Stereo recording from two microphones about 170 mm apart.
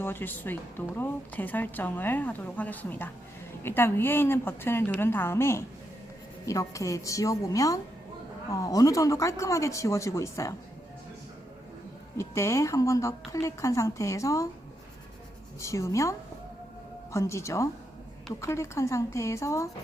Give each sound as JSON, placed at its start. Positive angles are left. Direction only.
{"t": 0.0, "sound": "a woman's voice", "side_deg": 10}
{"t": 12.1, "sound": "a woman's voice", "side_deg": 15}
{"t": 15.6, "sound": "a woman's voice", "side_deg": 15}